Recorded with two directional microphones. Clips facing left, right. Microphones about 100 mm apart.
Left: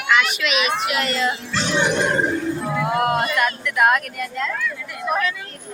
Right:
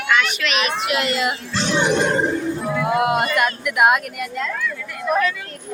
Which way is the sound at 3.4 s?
20° right (ahead or behind).